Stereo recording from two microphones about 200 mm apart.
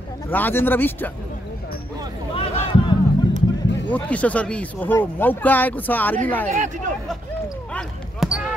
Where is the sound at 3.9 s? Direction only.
5° left (ahead or behind).